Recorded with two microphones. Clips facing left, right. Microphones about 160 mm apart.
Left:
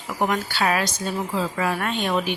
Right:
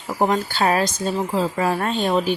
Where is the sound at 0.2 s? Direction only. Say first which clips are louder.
Right 3 dB; 30° right (ahead or behind).